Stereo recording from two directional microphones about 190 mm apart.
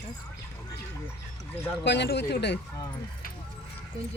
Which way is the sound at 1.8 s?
65° left (ahead or behind).